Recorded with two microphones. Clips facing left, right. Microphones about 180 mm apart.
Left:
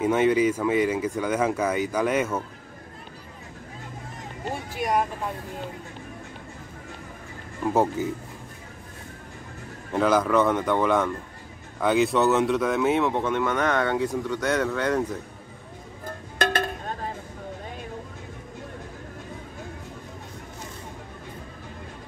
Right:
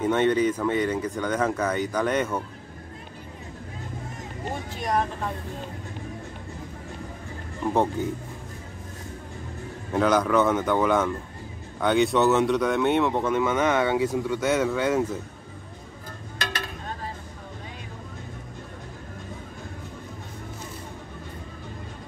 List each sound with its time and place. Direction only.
0.0 s speech: 5° left (ahead or behind)
4.7 s speech: 10° left (ahead or behind)
7.7 s speech: 5° left (ahead or behind)
9.9 s speech: centre (ahead or behind)
16.3 s a sound: 50° left (ahead or behind)